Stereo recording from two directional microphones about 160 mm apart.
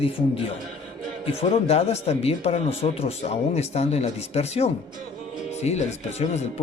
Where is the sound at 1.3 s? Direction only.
40° left (ahead or behind).